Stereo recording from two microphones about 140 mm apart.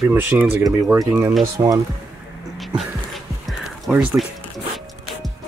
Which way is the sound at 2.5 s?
Centre (ahead or behind).